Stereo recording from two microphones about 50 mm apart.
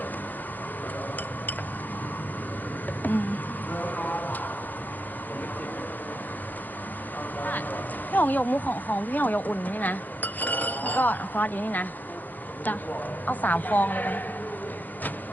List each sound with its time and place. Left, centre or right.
3.0 s a sound: left
7.4 s speech: left
13.2 s a woman's voice: left